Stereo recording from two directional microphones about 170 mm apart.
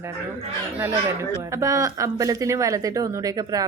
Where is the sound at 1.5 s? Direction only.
20° right (ahead or behind).